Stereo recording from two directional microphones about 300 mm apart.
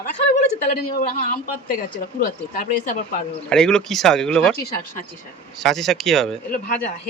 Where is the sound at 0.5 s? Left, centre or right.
Left.